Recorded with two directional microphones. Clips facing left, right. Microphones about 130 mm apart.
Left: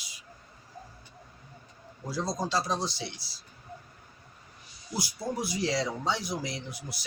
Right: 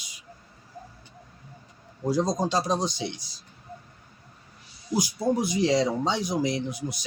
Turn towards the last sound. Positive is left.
turn(degrees=-20)  # may be behind; listen again after turning